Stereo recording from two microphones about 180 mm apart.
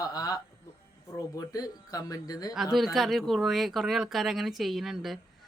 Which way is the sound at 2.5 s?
Centre (ahead or behind).